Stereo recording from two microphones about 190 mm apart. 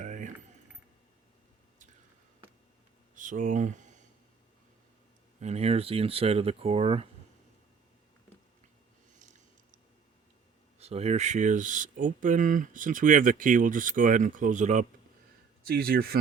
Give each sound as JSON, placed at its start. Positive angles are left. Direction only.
{"t": 0.0, "sound": "a sound", "side_deg": -40}
{"t": 3.2, "sound": "speech", "side_deg": -45}
{"t": 5.4, "sound": "speech", "side_deg": -35}
{"t": 10.8, "sound": "speech", "side_deg": -35}
{"t": 15.6, "sound": "speech", "side_deg": -50}